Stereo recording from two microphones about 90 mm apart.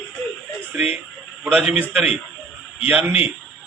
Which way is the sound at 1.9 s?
10° right (ahead or behind).